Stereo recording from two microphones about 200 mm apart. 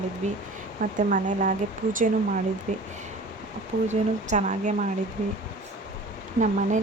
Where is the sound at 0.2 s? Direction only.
35° right (ahead or behind).